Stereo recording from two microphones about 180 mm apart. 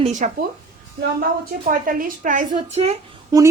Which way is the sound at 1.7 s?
50° right (ahead or behind).